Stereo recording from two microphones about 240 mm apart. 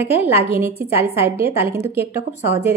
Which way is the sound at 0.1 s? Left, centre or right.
Left.